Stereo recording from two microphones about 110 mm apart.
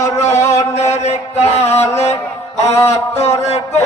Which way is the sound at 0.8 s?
85° left.